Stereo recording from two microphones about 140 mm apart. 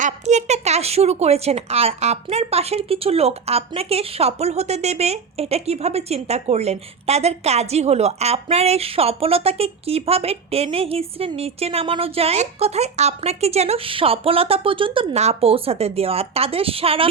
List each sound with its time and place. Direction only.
0.0 s speech: 55° right (ahead or behind)